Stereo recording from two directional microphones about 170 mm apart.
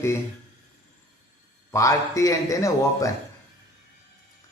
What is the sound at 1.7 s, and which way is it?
A man's voice, 20° left (ahead or behind).